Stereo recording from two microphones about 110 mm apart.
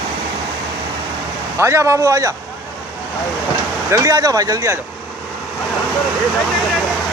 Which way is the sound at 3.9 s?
30° right (ahead or behind).